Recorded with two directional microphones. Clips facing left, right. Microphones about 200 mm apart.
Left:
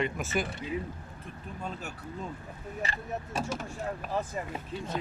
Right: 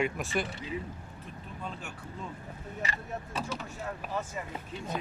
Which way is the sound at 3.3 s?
45° left (ahead or behind).